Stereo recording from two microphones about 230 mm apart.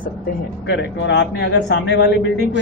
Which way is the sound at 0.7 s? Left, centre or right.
Left.